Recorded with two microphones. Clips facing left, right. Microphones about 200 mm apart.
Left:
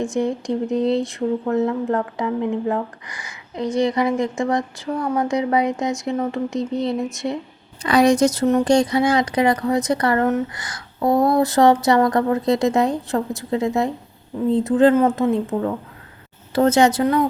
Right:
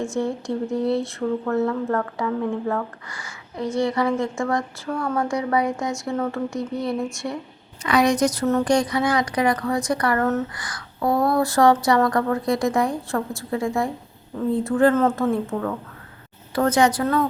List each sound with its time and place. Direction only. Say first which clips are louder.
0.0 s speech: left 3 dB; 15° left (ahead or behind)
7.8 s speech: left 4 dB; 30° left (ahead or behind); by 17.2 s 15° left (ahead or behind)